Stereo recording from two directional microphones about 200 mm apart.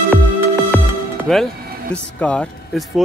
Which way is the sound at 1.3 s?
Centre (ahead or behind).